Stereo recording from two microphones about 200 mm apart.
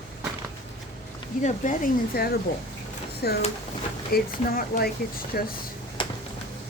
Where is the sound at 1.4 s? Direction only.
40° left (ahead or behind).